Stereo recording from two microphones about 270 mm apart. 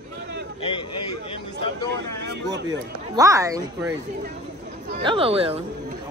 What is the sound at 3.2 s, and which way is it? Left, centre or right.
Speech, centre.